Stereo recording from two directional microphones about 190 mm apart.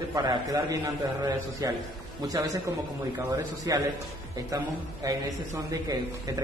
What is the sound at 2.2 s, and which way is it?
Speech, 20° right (ahead or behind).